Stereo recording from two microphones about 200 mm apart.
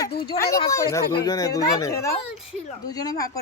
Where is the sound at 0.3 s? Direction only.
25° left (ahead or behind).